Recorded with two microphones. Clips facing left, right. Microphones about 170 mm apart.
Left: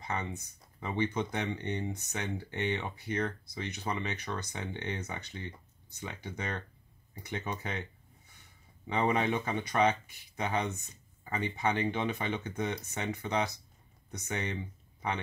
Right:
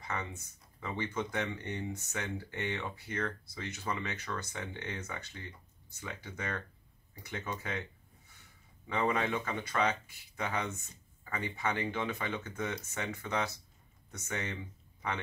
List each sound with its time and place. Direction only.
0.0 s speech: 20° left (ahead or behind)
8.8 s speech: 20° left (ahead or behind)